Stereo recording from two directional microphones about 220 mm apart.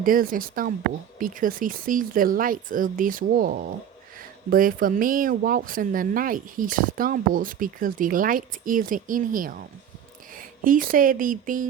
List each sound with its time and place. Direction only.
0.0 s speech: 40° right (ahead or behind)